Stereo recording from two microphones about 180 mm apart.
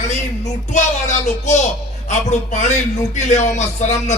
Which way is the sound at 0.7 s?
40° left (ahead or behind).